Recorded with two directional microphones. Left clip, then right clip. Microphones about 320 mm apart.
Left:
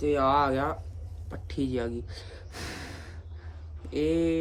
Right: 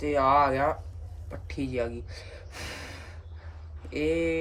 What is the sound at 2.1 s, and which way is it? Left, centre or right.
Gasp, centre.